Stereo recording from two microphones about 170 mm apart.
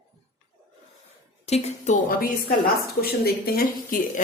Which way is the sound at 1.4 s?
40° left (ahead or behind).